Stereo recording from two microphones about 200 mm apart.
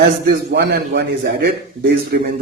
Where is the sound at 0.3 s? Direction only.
55° right (ahead or behind).